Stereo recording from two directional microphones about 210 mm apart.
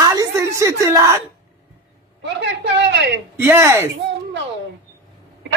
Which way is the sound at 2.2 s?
55° right (ahead or behind).